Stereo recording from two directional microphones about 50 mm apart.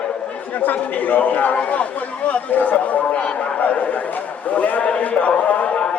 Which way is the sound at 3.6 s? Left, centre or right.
Left.